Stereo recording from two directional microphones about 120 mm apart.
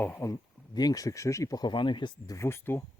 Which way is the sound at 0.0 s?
15° left (ahead or behind).